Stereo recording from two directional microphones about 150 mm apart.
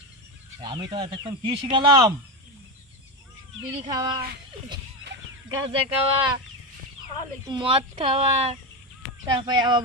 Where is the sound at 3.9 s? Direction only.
25° right (ahead or behind).